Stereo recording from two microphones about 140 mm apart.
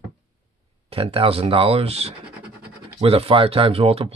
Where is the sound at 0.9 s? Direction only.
40° right (ahead or behind).